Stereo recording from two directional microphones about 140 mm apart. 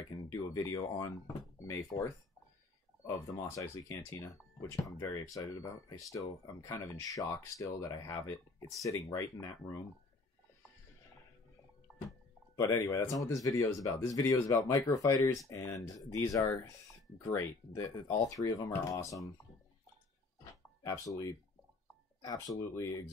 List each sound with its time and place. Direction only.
0.1 s a sound: 25° left (ahead or behind)
0.9 s speech: 20° left (ahead or behind)
3.2 s speech: 25° left (ahead or behind)
12.5 s speech: 20° left (ahead or behind)
20.8 s speech: 25° left (ahead or behind)